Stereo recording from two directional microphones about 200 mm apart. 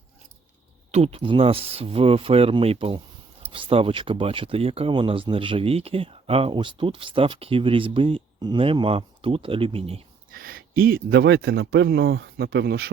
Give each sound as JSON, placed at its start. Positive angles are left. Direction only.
{"t": 0.9, "sound": "speech", "side_deg": -30}
{"t": 10.3, "sound": "speech", "side_deg": -45}